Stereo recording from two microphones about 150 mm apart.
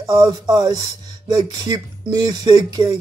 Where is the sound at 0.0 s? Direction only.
25° right (ahead or behind).